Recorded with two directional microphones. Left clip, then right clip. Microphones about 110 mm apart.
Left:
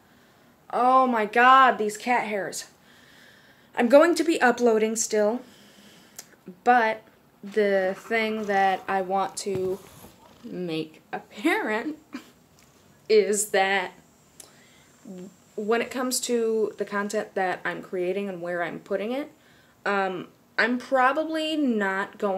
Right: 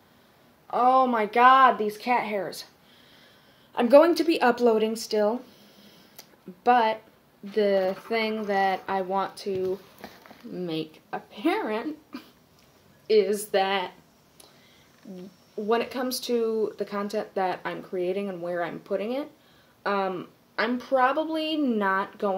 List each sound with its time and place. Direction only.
0.7 s speech: 5° left (ahead or behind)
3.7 s a woman's voice: 15° left (ahead or behind)
13.0 s speech: centre (ahead or behind)
15.0 s speech: centre (ahead or behind)